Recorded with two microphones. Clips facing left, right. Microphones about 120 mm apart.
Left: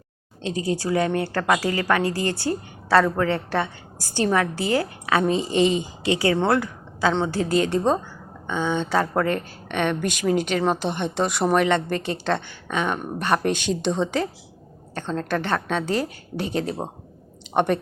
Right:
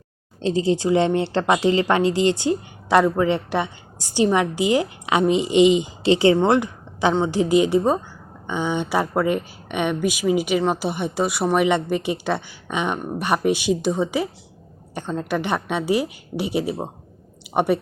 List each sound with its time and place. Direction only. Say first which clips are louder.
0.4 s a woman's voice: right 5 dB; 25° right (ahead or behind)
6.0 s a woman's voice: right 4 dB; 25° right (ahead or behind); by 17.7 s 10° right (ahead or behind)